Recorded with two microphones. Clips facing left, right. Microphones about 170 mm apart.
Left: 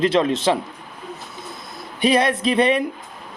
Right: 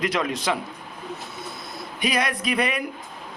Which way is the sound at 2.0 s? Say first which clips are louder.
Left 7 dB; 30° left (ahead or behind).